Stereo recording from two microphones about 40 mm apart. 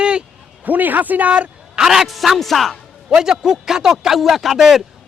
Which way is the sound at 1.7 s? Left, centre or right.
Centre.